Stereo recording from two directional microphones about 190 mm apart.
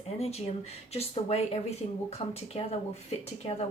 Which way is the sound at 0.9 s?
35° left (ahead or behind).